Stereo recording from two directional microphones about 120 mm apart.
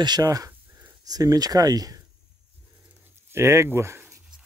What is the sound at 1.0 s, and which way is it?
Speech, 30° right (ahead or behind).